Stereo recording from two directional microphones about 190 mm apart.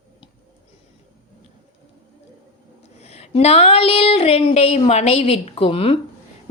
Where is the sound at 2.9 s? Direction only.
35° left (ahead or behind).